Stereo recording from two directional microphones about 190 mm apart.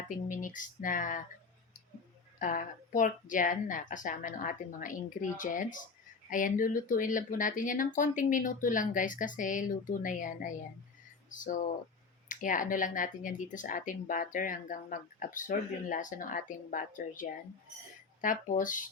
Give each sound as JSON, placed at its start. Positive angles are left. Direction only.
{"t": 0.3, "sound": "speech", "side_deg": 45}
{"t": 2.4, "sound": "speech", "side_deg": 45}